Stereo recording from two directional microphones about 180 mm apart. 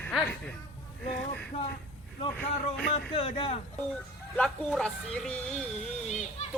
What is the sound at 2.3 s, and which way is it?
Speech, 5° left (ahead or behind).